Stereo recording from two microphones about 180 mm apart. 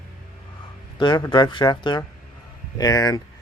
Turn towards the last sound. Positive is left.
turn(degrees=20)  # may be behind; listen again after turning